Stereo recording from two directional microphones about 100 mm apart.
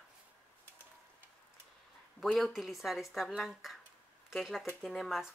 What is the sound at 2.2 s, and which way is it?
Speech, centre (ahead or behind).